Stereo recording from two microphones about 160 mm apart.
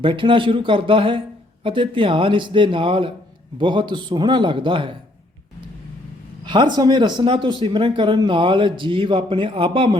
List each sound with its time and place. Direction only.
0.0 s speech: 30° right (ahead or behind)
6.4 s speech: 30° right (ahead or behind)